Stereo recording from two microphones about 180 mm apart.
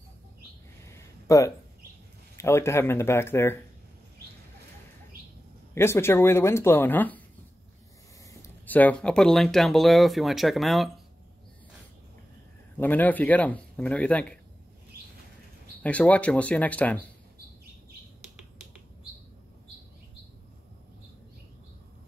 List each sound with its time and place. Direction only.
0.9 s a sound: 15° left (ahead or behind)
2.3 s speech: 15° left (ahead or behind)
5.8 s speech: 15° left (ahead or behind)
8.3 s speech: 10° left (ahead or behind)
12.7 s speech: 10° left (ahead or behind)
15.8 s speech: 10° left (ahead or behind)